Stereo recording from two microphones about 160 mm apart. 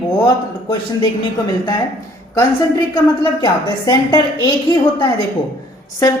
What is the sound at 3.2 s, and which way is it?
A woman's voice, 30° left (ahead or behind).